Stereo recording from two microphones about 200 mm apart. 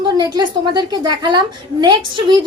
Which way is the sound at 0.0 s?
20° right (ahead or behind).